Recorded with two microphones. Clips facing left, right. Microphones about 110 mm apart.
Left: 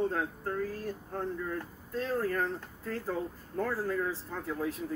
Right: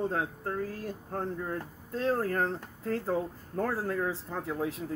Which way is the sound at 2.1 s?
50° right (ahead or behind).